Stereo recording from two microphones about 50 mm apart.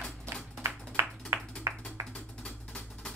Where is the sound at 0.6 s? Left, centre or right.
Right.